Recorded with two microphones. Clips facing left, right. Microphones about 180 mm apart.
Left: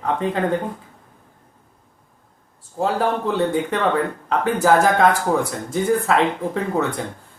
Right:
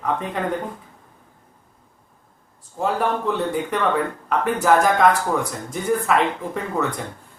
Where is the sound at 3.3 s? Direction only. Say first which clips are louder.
Left 2 dB; 30° left (ahead or behind).